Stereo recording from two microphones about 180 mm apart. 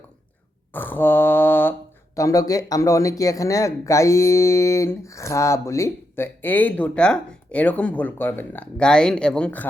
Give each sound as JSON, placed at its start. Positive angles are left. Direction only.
{"t": 0.7, "sound": "mantra", "side_deg": 10}
{"t": 2.1, "sound": "speech", "side_deg": 20}